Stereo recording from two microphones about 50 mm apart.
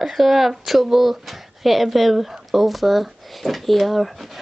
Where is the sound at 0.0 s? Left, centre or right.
Centre.